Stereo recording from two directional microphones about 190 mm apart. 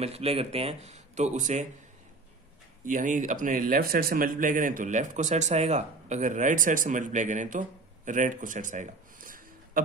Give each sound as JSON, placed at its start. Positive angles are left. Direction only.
{"t": 0.0, "sound": "speech", "side_deg": -30}
{"t": 2.8, "sound": "speech", "side_deg": -45}